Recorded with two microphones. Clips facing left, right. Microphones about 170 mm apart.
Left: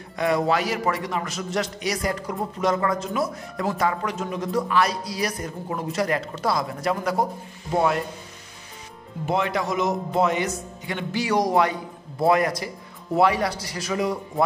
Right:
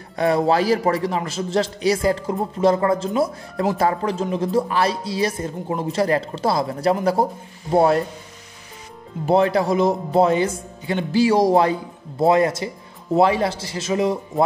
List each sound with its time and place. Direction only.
0.1 s a man's voice: 30° right (ahead or behind)
9.2 s a man's voice: 35° right (ahead or behind)